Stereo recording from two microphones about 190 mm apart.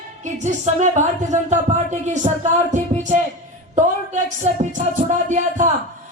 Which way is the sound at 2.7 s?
40° right (ahead or behind).